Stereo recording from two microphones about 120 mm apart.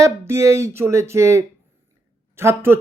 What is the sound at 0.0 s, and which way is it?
Speech, 25° right (ahead or behind).